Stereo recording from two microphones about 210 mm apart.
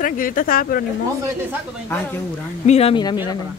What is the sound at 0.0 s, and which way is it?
Speech, 40° left (ahead or behind).